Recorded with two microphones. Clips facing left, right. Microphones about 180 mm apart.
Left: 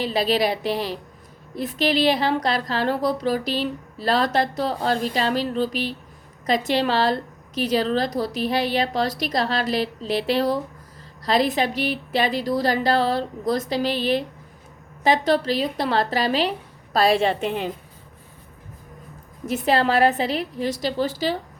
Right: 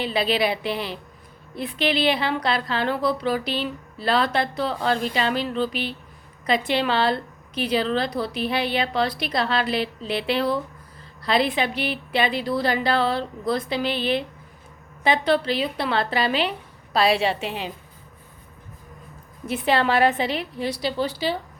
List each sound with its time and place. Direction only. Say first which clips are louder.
0.0 s a woman's voice: left 1 dB; 40° left (ahead or behind)
19.5 s a woman's voice: left 1 dB; 40° left (ahead or behind)